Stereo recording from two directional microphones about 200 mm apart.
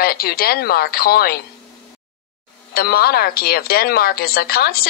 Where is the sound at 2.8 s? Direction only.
50° left (ahead or behind).